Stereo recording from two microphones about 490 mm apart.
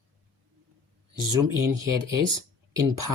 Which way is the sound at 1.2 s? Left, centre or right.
Right.